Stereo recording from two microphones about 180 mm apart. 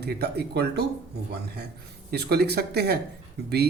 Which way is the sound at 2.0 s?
65° right (ahead or behind).